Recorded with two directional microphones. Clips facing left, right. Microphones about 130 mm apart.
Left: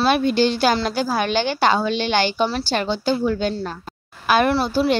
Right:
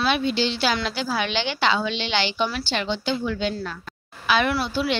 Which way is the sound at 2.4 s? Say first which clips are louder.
Left 4 dB; 30° left (ahead or behind).